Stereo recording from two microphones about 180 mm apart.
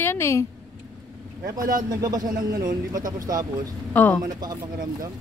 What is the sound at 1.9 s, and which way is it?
A man's voice, 20° right (ahead or behind).